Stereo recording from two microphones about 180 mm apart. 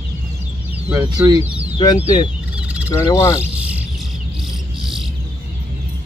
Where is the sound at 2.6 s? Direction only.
5° right (ahead or behind).